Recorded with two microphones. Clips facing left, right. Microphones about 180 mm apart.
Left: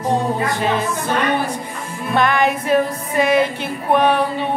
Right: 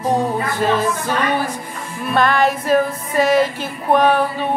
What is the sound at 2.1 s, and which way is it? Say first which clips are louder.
Music: right 1 dB; 20° left (ahead or behind).